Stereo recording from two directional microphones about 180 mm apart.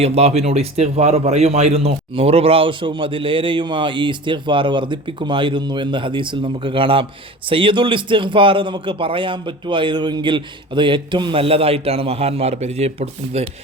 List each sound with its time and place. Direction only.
0.0 s a man's voice: 35° right (ahead or behind)